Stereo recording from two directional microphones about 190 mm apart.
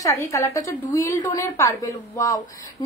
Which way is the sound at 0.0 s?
15° left (ahead or behind).